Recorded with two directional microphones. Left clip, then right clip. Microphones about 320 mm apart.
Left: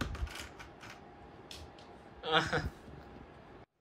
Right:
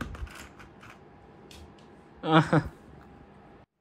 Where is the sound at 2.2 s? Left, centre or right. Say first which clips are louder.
Right 7 dB; centre.